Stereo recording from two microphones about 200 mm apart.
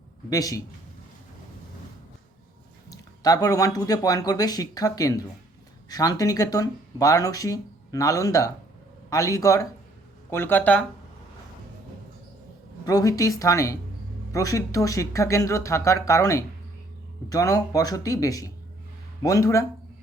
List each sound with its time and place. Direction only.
0.3 s speech: 15° left (ahead or behind)
2.9 s speech: 20° left (ahead or behind)
12.8 s speech: 15° left (ahead or behind)